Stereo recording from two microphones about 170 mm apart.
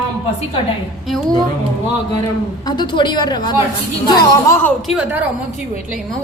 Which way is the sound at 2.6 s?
25° left (ahead or behind).